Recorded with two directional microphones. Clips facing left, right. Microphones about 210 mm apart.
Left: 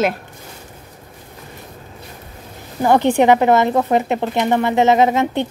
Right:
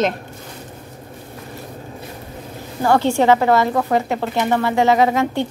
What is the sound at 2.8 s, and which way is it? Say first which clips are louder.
Speech: left 2 dB; 15° left (ahead or behind).